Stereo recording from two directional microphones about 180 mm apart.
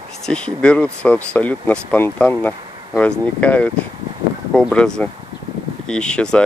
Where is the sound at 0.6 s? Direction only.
5° left (ahead or behind).